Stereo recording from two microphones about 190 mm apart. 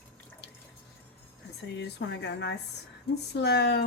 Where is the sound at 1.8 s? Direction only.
65° left (ahead or behind).